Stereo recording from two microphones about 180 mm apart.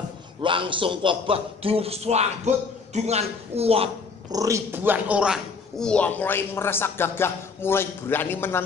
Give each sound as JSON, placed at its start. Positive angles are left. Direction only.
{"t": 0.4, "sound": "a man's voice", "side_deg": -30}
{"t": 4.3, "sound": "speech", "side_deg": -20}